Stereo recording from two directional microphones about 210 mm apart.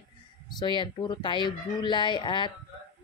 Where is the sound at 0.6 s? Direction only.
20° left (ahead or behind).